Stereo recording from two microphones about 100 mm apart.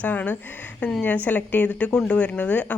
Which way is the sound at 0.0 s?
15° left (ahead or behind).